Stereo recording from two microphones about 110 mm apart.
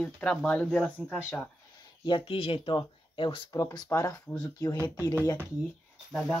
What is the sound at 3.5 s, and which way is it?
Speech, 25° left (ahead or behind).